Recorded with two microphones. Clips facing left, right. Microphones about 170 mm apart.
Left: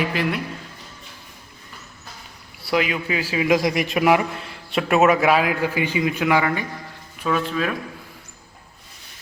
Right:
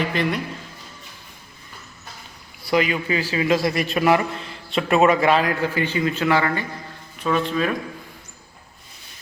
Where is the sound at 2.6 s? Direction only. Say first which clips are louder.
Right 1 dB; 5° left (ahead or behind).